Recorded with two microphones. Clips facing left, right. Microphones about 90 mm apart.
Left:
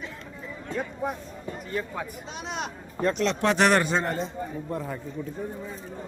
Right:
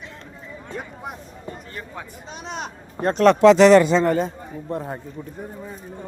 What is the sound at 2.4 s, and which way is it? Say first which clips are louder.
Speech: right 2 dB; centre (ahead or behind).